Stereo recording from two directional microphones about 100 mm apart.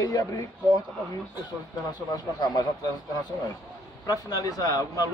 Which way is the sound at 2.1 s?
45° left (ahead or behind).